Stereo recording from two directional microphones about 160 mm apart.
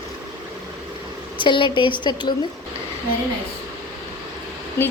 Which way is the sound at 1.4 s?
30° left (ahead or behind).